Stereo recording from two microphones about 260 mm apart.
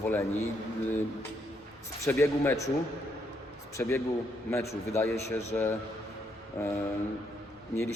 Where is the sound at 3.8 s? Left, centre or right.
Centre.